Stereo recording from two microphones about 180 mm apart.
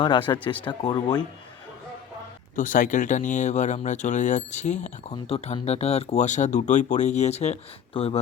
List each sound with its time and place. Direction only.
0.0 s speech: 25° left (ahead or behind)
2.6 s speech: 45° left (ahead or behind)